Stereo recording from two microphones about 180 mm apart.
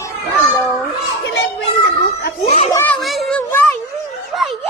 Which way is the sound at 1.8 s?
60° left (ahead or behind).